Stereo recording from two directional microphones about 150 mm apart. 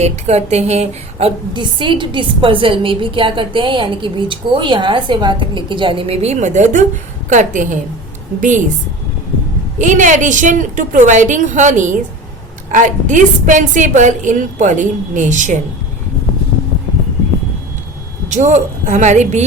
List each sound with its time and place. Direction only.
0.0 s a woman's voice: 45° right (ahead or behind)
1.5 s a woman's voice: 35° right (ahead or behind); by 8.6 s 55° right (ahead or behind)
9.7 s a woman's voice: 55° right (ahead or behind)
18.3 s a woman's voice: 50° right (ahead or behind)